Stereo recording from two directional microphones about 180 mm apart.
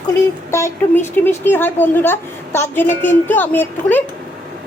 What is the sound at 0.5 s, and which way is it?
A woman's voice, 10° left (ahead or behind).